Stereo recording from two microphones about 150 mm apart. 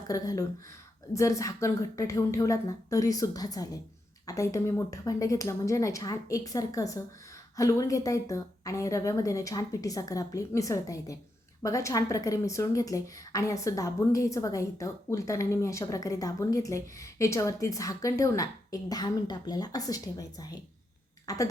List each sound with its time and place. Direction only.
0.1 s a woman's voice: 25° left (ahead or behind)